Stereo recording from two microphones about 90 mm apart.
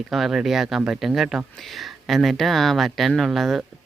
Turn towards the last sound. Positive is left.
turn(degrees=0)  # may be behind; listen again after turning